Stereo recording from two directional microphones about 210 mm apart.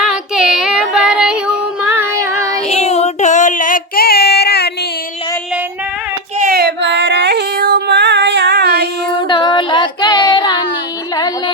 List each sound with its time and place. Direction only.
0.0 s child singing: 5° right (ahead or behind)
2.6 s child singing: 30° left (ahead or behind); by 4.7 s 50° left (ahead or behind)
6.4 s female singing: 50° right (ahead or behind)
9.2 s child singing: 25° left (ahead or behind)
11.1 s music: 20° left (ahead or behind)